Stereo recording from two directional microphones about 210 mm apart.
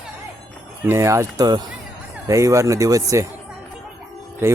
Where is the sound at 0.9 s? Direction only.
15° right (ahead or behind).